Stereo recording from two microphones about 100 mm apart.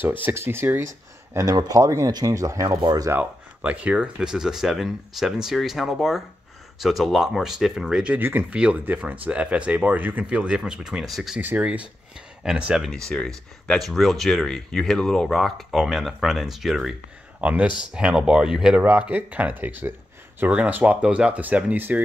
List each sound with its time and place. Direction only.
0.0 s speech: 20° right (ahead or behind); by 3.1 s 40° right (ahead or behind)
3.1 s speech: 15° right (ahead or behind)
11.4 s speech: 15° right (ahead or behind)
12.9 s speech: 5° left (ahead or behind)
17.4 s speech: 15° right (ahead or behind)